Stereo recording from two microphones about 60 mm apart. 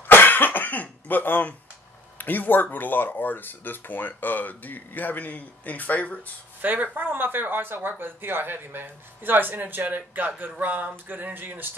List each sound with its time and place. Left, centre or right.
0.0 s cough: left
2.1 s speech: left
6.6 s speech: right